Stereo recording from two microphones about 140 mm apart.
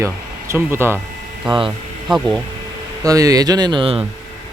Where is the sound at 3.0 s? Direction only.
25° right (ahead or behind).